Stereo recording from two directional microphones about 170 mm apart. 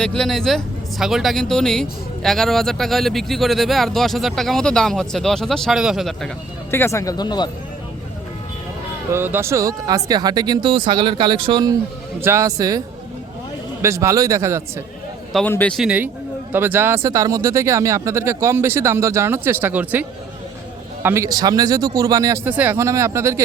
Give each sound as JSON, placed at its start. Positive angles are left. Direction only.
{"t": 0.0, "sound": "speech", "side_deg": 5}
{"t": 6.7, "sound": "speech", "side_deg": 15}
{"t": 9.1, "sound": "speech", "side_deg": -15}
{"t": 12.2, "sound": "speech", "side_deg": -15}
{"t": 13.8, "sound": "speech", "side_deg": -15}
{"t": 15.4, "sound": "speech", "side_deg": 10}
{"t": 15.8, "sound": "speech", "side_deg": -10}
{"t": 22.4, "sound": "speech", "side_deg": -10}